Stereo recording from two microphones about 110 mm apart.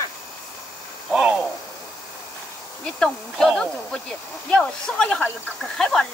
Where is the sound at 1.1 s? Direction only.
10° right (ahead or behind).